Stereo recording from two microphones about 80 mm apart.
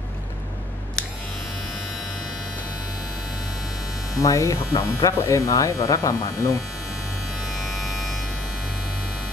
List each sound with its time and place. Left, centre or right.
4.2 s speech: left
7.7 s electric shaver: centre